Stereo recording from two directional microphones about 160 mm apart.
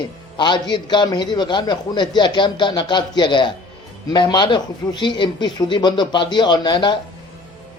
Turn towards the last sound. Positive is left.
turn(degrees=30)  # may be behind; listen again after turning